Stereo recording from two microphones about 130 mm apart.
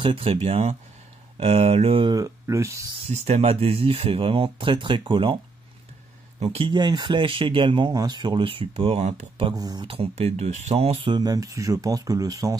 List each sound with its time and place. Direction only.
0.0 s speech: 45° right (ahead or behind)
2.1 s speech: 25° right (ahead or behind)
3.1 s speech: 60° right (ahead or behind); by 5.4 s 40° right (ahead or behind)
6.4 s speech: 45° right (ahead or behind); by 9.3 s 65° right (ahead or behind)
9.5 s speech: 30° right (ahead or behind)
9.8 s speech: 45° right (ahead or behind); by 12.5 s 25° right (ahead or behind)